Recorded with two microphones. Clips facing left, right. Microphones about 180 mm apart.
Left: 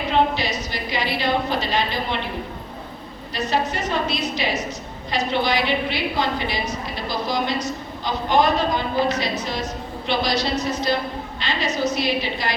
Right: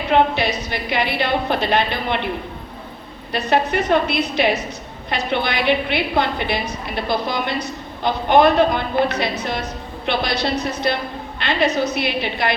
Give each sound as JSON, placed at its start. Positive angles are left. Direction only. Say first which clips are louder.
{"t": 0.1, "sound": "a woman's voice", "louder": "right 4 dB", "side_deg": -60}
{"t": 3.3, "sound": "a woman's voice", "louder": "right 5 dB", "side_deg": -60}